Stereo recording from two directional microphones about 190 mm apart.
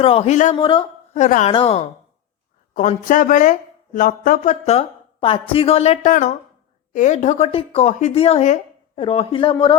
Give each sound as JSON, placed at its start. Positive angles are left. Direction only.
{"t": 0.0, "sound": "speech", "side_deg": 30}
{"t": 0.5, "sound": "speech", "side_deg": 25}
{"t": 1.2, "sound": "speech", "side_deg": 40}
{"t": 2.7, "sound": "a man's voice", "side_deg": 40}